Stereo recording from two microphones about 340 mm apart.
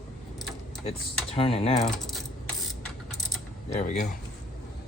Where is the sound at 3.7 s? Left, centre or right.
Left.